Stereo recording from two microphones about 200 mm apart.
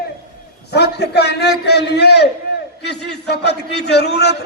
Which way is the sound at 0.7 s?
55° left (ahead or behind).